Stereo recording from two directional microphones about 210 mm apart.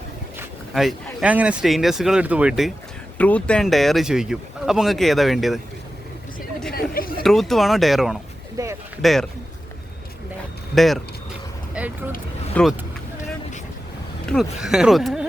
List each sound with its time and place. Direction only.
0.7 s speech: centre (ahead or behind)
6.9 s chatter: 45° left (ahead or behind)
7.2 s speech: centre (ahead or behind)
8.6 s a sound: 15° right (ahead or behind)
9.0 s speech: centre (ahead or behind)
10.8 s speech: centre (ahead or behind)
11.8 s vehicle: 5° right (ahead or behind)
12.6 s speech: 5° left (ahead or behind)
14.3 s speech: centre (ahead or behind)